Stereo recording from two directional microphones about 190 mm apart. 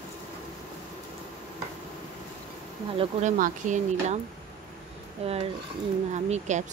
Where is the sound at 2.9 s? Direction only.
40° right (ahead or behind).